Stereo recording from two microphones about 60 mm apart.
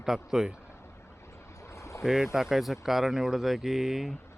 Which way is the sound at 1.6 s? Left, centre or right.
Left.